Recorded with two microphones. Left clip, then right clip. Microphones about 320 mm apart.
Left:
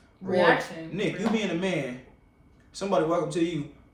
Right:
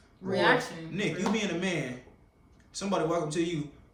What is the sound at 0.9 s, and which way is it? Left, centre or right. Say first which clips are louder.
Speech: left 2 dB; centre.